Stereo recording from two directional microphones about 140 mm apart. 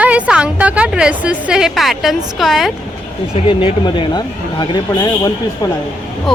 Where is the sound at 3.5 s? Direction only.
35° left (ahead or behind).